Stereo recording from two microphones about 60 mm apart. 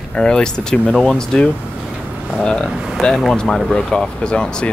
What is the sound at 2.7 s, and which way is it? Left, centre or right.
Speech, centre.